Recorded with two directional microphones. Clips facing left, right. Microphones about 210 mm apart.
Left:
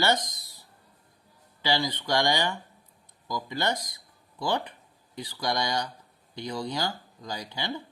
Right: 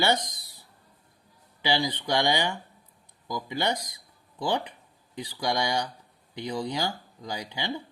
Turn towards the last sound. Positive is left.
turn(degrees=-10)  # may be behind; listen again after turning